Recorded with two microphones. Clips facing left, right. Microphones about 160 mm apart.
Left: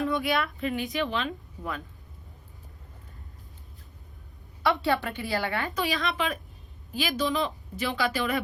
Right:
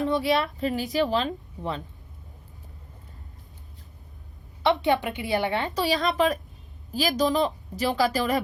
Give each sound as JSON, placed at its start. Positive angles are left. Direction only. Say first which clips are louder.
{"t": 0.1, "sound": "a woman's voice", "louder": "right 4 dB", "side_deg": -30}
{"t": 4.6, "sound": "a woman's voice", "louder": "right 3 dB", "side_deg": -20}
{"t": 5.8, "sound": "a woman's voice", "louder": "right 7 dB", "side_deg": -40}